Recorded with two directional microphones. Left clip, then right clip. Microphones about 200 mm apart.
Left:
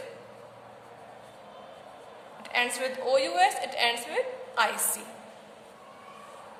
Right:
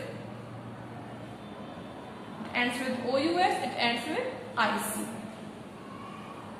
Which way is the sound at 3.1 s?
50° left (ahead or behind).